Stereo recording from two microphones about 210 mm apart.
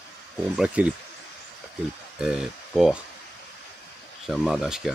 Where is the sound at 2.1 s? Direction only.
5° right (ahead or behind).